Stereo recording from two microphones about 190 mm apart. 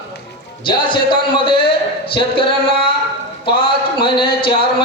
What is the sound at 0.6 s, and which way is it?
Speech, 25° left (ahead or behind).